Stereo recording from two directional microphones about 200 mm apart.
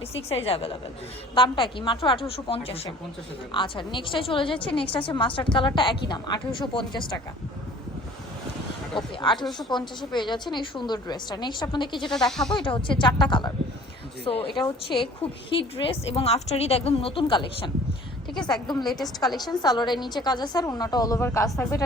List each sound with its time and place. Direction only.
0.1 s a woman's voice: 30° left (ahead or behind)
9.6 s a woman's voice: 20° left (ahead or behind)
12.1 s speech: centre (ahead or behind)
12.5 s a woman's voice: 25° left (ahead or behind)
18.9 s speech: centre (ahead or behind)
19.5 s a woman's voice: 20° left (ahead or behind)